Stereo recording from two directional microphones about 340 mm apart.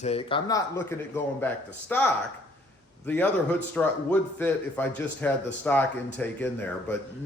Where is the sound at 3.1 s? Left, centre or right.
Centre.